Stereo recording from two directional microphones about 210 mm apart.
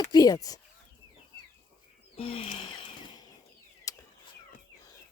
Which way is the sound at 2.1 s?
25° left (ahead or behind).